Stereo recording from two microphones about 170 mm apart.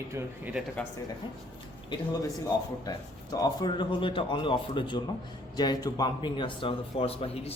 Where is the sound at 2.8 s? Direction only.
20° left (ahead or behind).